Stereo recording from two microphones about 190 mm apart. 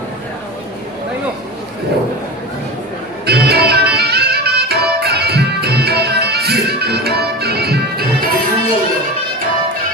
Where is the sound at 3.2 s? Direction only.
55° right (ahead or behind).